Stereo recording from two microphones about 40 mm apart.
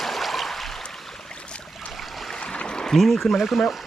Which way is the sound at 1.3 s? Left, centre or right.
Left.